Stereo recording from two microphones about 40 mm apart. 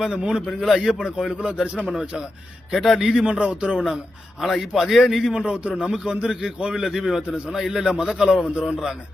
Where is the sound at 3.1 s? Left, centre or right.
Right.